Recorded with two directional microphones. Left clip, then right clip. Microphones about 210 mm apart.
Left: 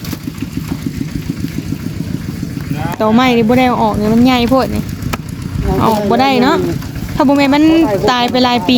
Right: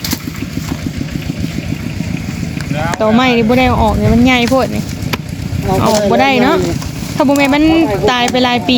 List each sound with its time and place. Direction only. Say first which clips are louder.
3.0 s speech: even; 20° left (ahead or behind)
5.8 s speech: right 1 dB; 15° left (ahead or behind)